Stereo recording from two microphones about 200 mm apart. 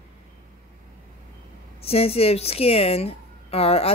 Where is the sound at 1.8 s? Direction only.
30° left (ahead or behind).